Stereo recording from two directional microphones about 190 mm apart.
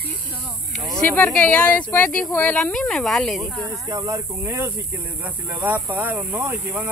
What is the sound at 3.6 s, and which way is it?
Speech, 15° right (ahead or behind).